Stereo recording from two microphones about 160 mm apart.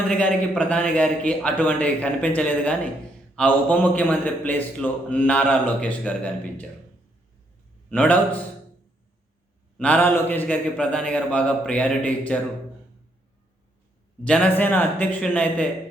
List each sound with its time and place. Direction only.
0.1 s a man's voice: 10° left (ahead or behind)
7.9 s a man's voice: 10° left (ahead or behind)
9.7 s a man's voice: 10° left (ahead or behind)
14.3 s a man's voice: 5° left (ahead or behind)